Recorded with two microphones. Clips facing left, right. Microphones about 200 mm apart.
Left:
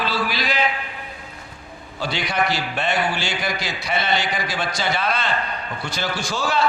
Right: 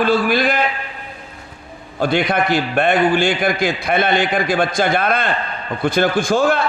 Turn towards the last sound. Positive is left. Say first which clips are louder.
# right 8 dB
turn(degrees=-55)  # may be behind; listen again after turning